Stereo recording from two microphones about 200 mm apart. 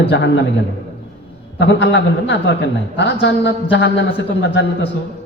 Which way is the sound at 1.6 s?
65° left (ahead or behind).